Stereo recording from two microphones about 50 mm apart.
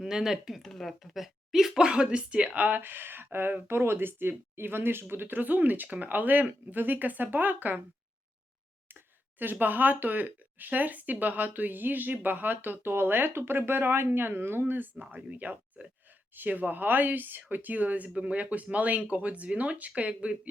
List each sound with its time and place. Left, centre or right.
0.0 s speech: centre
0.6 s speech: centre; by 2.5 s right
2.6 s speech: right
2.8 s speech: right
9.4 s speech: right
15.1 s speech: right